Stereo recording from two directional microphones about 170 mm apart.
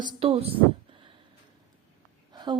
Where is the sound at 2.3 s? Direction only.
25° right (ahead or behind).